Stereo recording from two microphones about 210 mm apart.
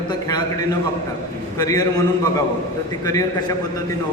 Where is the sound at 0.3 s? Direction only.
20° left (ahead or behind).